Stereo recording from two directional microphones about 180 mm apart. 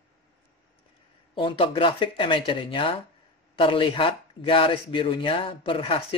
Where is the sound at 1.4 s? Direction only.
30° left (ahead or behind).